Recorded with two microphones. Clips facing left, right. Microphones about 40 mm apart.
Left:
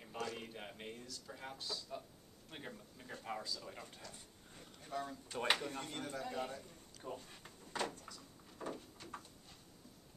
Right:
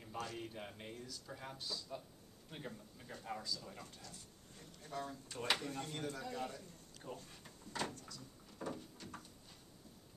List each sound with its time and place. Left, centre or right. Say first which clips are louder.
0.5 s speech: left 1 dB; centre
1.0 s speech: right 1 dB; centre
1.4 s speech: left 2 dB; centre
7.1 s a sound: left 2 dB; left
7.8 s speech: left 2 dB; centre
8.5 s a sound: even; centre